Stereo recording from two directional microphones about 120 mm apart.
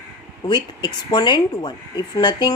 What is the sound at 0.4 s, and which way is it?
A woman's voice, 40° left (ahead or behind).